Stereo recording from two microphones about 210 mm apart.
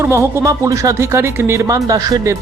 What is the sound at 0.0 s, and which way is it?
Speech, 10° right (ahead or behind).